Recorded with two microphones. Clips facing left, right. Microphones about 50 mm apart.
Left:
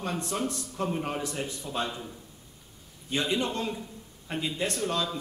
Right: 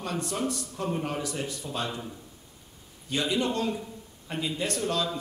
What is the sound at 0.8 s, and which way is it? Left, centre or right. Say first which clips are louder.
Speech: right 1 dB; centre.